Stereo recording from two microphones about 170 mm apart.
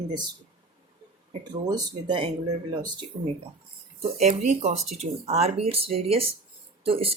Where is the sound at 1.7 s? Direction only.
25° right (ahead or behind).